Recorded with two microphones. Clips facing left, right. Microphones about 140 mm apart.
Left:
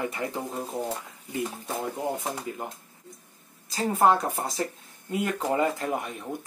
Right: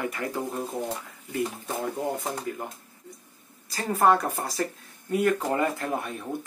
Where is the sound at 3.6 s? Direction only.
20° left (ahead or behind).